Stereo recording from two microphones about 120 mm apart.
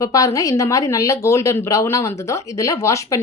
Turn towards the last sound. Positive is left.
turn(degrees=25)  # may be behind; listen again after turning